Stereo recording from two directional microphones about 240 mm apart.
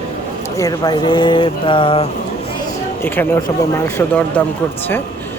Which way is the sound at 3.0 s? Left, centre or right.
Centre.